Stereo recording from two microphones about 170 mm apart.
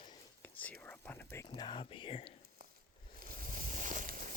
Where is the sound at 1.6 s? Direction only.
30° left (ahead or behind).